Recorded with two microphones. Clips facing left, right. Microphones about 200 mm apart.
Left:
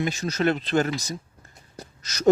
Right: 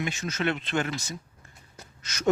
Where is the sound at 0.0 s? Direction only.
35° left (ahead or behind).